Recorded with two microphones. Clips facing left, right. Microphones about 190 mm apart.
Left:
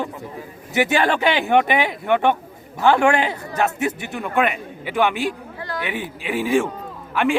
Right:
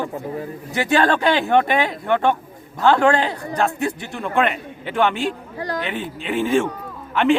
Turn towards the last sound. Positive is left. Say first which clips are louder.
# right 3 dB
turn(degrees=10)  # may be behind; listen again after turning